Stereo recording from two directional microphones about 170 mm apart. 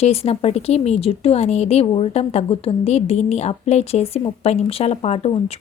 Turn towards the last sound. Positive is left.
turn(degrees=35)  # may be behind; listen again after turning